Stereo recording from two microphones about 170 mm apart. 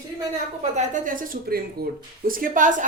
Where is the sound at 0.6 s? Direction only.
50° right (ahead or behind).